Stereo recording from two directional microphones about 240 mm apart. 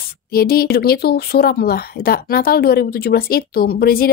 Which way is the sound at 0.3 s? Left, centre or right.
Left.